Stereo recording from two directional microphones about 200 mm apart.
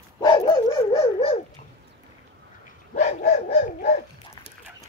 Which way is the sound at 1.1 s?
30° left (ahead or behind).